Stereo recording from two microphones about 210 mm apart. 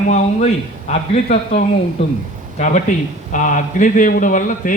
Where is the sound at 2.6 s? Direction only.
35° left (ahead or behind).